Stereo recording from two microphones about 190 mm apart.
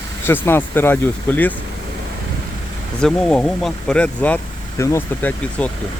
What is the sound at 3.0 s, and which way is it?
Speech, 5° left (ahead or behind).